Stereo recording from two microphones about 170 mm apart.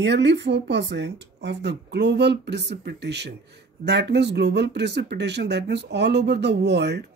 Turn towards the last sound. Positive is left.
turn(degrees=-85)